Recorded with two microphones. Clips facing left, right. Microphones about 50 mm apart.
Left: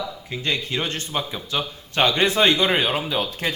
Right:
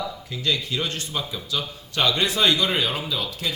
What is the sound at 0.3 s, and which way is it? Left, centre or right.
A man's voice, left.